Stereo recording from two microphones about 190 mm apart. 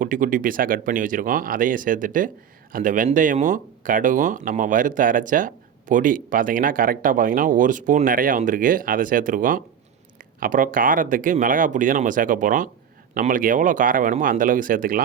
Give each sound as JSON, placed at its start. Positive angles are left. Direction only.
{"t": 0.0, "sound": "speech", "side_deg": -45}